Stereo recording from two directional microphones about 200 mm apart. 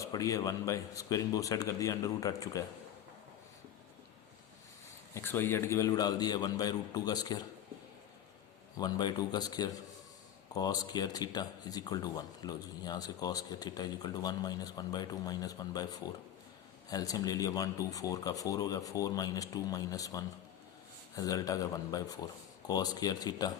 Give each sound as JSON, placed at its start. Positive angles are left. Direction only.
{"t": 0.0, "sound": "speech", "side_deg": 15}
{"t": 5.1, "sound": "speech", "side_deg": 10}
{"t": 8.8, "sound": "speech", "side_deg": 20}